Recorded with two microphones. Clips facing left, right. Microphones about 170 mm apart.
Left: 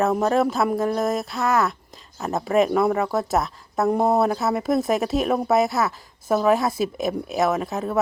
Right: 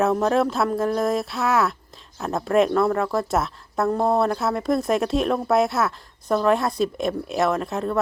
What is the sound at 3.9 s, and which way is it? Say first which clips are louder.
Speech: left 2 dB; 20° left (ahead or behind).